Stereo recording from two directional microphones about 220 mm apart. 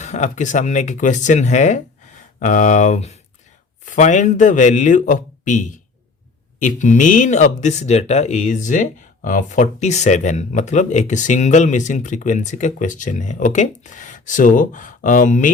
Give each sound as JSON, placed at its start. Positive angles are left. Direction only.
{"t": 0.0, "sound": "speech", "side_deg": 35}